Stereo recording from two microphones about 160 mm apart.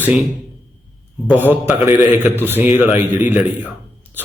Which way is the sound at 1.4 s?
10° right (ahead or behind).